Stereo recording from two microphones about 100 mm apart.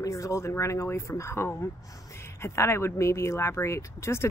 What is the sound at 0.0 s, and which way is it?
Speech, 35° left (ahead or behind).